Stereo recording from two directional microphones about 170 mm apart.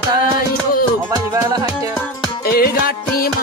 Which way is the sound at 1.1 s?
25° right (ahead or behind).